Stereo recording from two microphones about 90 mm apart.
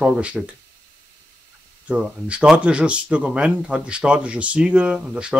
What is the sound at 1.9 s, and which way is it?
Speech, 15° right (ahead or behind).